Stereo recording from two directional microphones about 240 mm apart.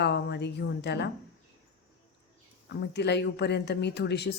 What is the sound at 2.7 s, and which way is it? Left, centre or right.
A woman's voice, left.